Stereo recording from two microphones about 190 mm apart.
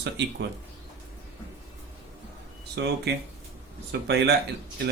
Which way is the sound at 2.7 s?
60° right (ahead or behind).